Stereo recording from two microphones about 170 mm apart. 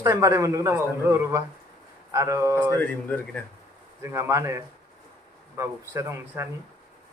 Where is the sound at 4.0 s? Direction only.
15° right (ahead or behind).